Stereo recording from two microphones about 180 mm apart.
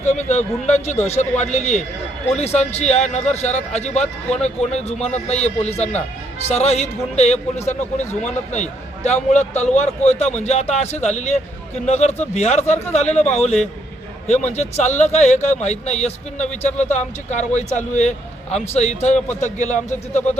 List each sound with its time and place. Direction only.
0.0 s a man's voice: 40° left (ahead or behind)